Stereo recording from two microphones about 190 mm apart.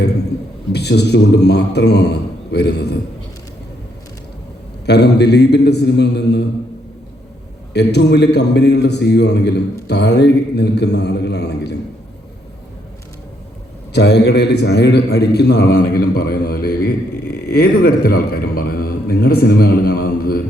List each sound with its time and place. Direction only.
0.7 s a man's voice: 60° left (ahead or behind)
4.9 s a man's voice: 60° left (ahead or behind)
7.7 s a man's voice: 60° left (ahead or behind)
13.9 s a man's voice: 60° left (ahead or behind)